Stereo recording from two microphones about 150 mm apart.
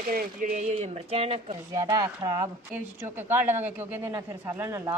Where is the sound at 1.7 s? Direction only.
25° right (ahead or behind).